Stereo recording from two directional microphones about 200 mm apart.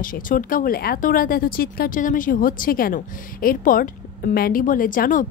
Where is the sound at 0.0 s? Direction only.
45° left (ahead or behind).